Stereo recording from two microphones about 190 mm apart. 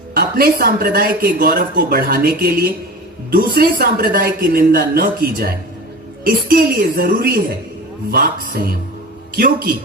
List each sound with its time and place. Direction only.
0.1 s a man's voice: 55° right (ahead or behind)